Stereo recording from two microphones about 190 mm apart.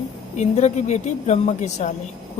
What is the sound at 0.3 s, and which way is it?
A woman's voice, 35° left (ahead or behind).